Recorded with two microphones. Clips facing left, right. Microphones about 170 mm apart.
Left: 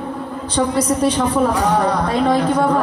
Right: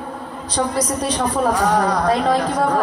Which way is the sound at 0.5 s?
30° left (ahead or behind).